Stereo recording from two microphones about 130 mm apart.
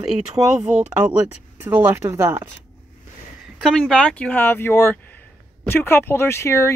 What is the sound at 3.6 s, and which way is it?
Speech, centre (ahead or behind).